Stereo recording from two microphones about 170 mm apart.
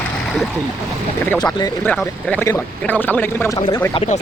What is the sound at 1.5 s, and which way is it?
Speech, 20° left (ahead or behind).